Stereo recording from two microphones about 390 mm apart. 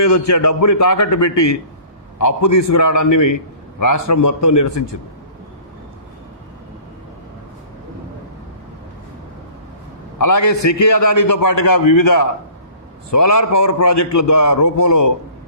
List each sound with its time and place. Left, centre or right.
0.0 s a man's voice: left
10.2 s a man's voice: left